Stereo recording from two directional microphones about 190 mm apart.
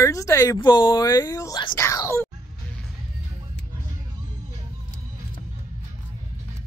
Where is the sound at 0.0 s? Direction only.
15° left (ahead or behind).